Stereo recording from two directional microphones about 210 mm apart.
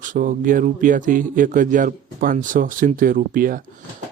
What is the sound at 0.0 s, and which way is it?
Speech, 40° right (ahead or behind).